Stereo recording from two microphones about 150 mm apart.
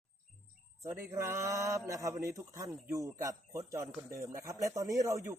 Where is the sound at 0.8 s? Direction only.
20° right (ahead or behind).